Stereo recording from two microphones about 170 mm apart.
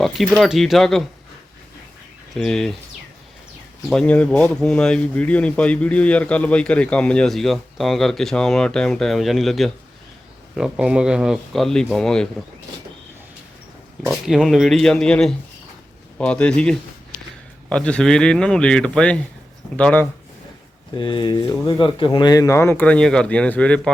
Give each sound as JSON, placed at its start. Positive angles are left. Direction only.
{"t": 0.0, "sound": "speech", "side_deg": 0}
{"t": 2.3, "sound": "speech", "side_deg": 5}
{"t": 3.8, "sound": "speech", "side_deg": 5}
{"t": 14.1, "sound": "speech", "side_deg": 0}
{"t": 20.9, "sound": "speech", "side_deg": 30}